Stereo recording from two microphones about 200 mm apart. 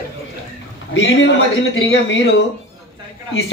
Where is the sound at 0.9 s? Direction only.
70° left (ahead or behind).